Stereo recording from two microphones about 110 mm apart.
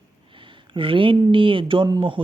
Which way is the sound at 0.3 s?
50° right (ahead or behind).